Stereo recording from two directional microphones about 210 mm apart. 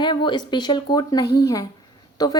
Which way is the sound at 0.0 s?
20° left (ahead or behind).